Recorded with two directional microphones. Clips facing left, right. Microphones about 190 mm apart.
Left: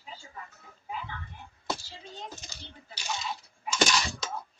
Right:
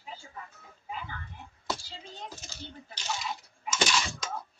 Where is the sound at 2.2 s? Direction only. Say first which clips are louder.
Right 1 dB; 15° left (ahead or behind).